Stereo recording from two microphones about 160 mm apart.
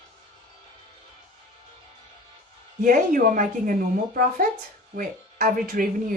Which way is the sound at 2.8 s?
60° right (ahead or behind).